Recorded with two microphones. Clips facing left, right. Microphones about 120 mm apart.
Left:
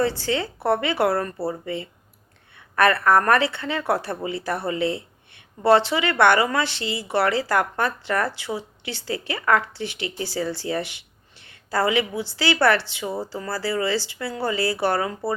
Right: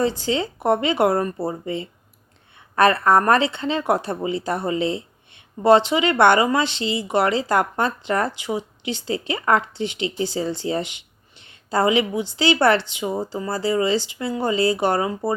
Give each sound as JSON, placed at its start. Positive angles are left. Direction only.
{"t": 0.0, "sound": "speech", "side_deg": -20}